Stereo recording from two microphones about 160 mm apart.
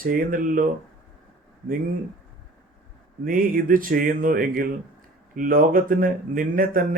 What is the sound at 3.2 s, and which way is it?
Speech, 60° right (ahead or behind).